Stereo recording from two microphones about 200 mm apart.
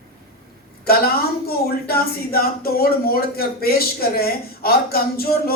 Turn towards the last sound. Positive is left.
turn(degrees=50)  # may be behind; listen again after turning